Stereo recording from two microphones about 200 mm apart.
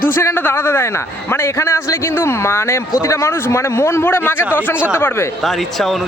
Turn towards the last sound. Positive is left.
turn(degrees=0)  # may be behind; listen again after turning